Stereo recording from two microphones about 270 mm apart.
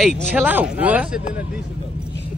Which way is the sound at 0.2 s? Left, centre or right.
Centre.